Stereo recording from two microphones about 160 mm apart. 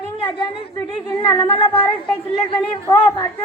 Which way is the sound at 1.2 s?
30° left (ahead or behind).